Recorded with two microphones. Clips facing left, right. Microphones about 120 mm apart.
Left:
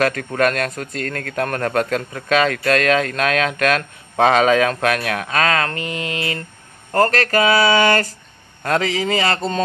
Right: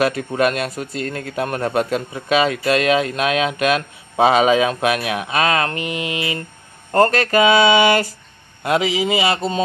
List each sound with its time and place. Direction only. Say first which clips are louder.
0.0 s a man's voice: even; 10° right (ahead or behind)